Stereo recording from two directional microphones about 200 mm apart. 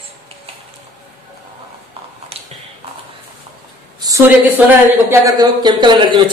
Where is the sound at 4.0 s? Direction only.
15° right (ahead or behind).